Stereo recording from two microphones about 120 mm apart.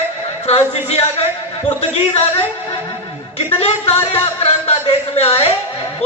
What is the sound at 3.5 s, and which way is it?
A man's voice, 60° left (ahead or behind).